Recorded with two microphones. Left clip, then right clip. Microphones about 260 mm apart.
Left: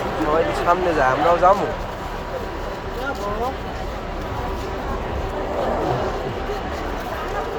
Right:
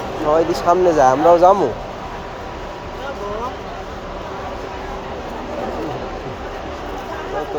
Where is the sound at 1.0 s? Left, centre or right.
Right.